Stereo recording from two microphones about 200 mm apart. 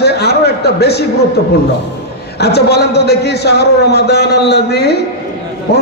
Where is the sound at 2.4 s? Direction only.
55° left (ahead or behind).